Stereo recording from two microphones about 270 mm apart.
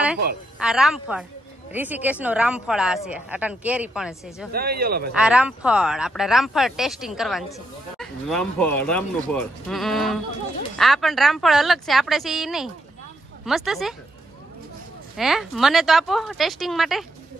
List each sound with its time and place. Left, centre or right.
0.6 s speech: centre
4.5 s speech: right
5.1 s speech: centre
15.1 s speech: centre